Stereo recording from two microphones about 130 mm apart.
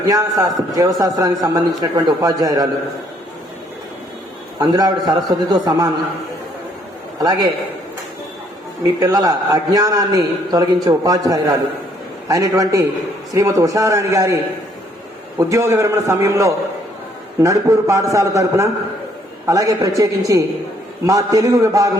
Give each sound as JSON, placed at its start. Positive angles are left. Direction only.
{"t": 0.0, "sound": "a man's voice", "side_deg": -25}
{"t": 4.6, "sound": "a man's voice", "side_deg": -30}
{"t": 7.2, "sound": "a man's voice", "side_deg": -30}
{"t": 8.8, "sound": "a man's voice", "side_deg": -25}
{"t": 15.4, "sound": "a man's voice", "side_deg": -25}